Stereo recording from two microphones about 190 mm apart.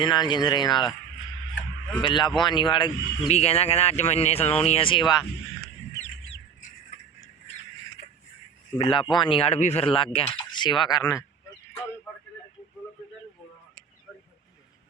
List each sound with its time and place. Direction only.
0.0 s speech: 25° left (ahead or behind)
2.0 s speech: 25° left (ahead or behind)
3.2 s speech: 35° left (ahead or behind)
6.0 s bird: 75° left (ahead or behind)
8.8 s speech: 25° left (ahead or behind)